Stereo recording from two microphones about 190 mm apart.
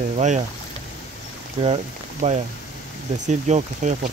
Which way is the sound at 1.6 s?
35° right (ahead or behind).